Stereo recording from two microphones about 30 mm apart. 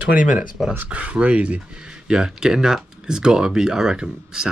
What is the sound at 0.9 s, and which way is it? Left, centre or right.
Speech, right.